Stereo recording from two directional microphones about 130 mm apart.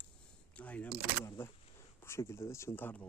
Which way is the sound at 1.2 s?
20° left (ahead or behind).